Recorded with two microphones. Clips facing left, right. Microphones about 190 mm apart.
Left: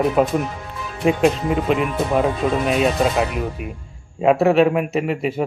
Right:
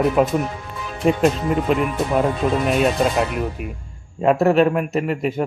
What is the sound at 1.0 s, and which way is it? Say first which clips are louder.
Speech: even; centre (ahead or behind).